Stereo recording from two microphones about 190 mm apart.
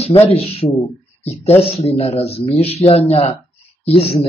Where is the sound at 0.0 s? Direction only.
30° left (ahead or behind).